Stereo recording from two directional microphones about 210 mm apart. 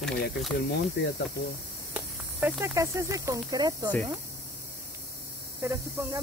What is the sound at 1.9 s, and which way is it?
Speech, 10° right (ahead or behind).